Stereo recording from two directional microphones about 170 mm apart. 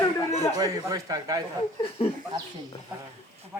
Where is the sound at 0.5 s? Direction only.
20° right (ahead or behind).